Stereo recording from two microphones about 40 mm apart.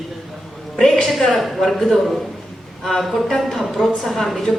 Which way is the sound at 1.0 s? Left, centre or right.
Centre.